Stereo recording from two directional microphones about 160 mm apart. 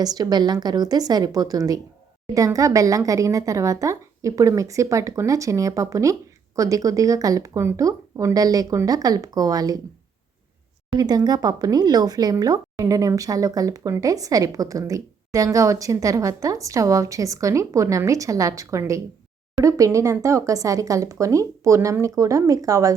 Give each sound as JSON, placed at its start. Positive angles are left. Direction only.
{"t": 0.0, "sound": "speech", "side_deg": -25}
{"t": 10.9, "sound": "speech", "side_deg": -25}